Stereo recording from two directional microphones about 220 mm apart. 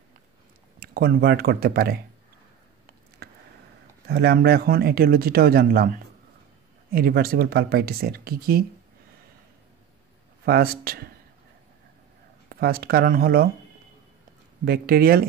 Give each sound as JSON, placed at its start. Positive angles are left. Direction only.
{"t": 0.7, "sound": "speech", "side_deg": -45}
{"t": 3.2, "sound": "a sound", "side_deg": -45}
{"t": 4.1, "sound": "speech", "side_deg": -45}
{"t": 10.4, "sound": "speech", "side_deg": -45}
{"t": 12.4, "sound": "speech", "side_deg": -45}
{"t": 14.6, "sound": "speech", "side_deg": -45}